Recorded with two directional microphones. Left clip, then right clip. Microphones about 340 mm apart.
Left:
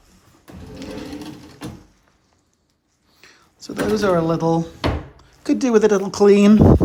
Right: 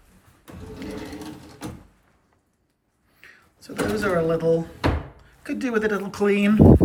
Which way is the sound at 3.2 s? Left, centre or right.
Centre.